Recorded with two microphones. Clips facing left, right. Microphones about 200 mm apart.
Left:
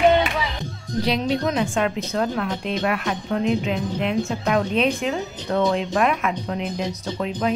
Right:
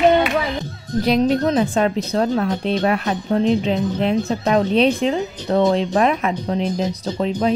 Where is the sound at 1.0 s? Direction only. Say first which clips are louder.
Right 5 dB; 45° right (ahead or behind).